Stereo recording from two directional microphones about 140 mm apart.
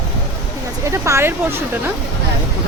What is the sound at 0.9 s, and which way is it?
Speech, 20° right (ahead or behind).